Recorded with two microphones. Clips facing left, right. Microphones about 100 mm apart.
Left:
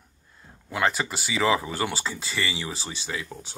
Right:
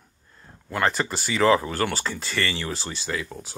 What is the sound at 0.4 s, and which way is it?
Speech, 5° left (ahead or behind).